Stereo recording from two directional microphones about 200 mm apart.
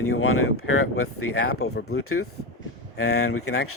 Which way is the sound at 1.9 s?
90° left.